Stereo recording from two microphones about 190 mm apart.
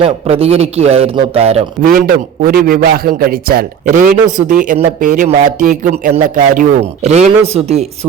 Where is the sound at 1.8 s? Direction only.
50° right (ahead or behind).